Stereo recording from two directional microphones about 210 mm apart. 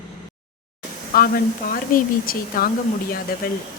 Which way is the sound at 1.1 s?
45° left (ahead or behind).